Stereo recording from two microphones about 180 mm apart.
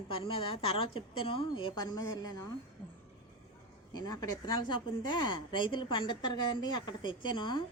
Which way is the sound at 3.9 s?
20° left (ahead or behind).